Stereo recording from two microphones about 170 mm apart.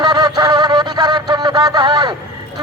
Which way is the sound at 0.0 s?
25° right (ahead or behind).